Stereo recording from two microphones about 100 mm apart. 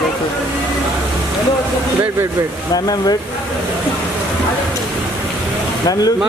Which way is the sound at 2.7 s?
40° left (ahead or behind).